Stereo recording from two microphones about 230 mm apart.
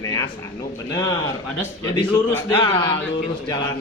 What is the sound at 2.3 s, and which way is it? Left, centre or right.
Speech, centre.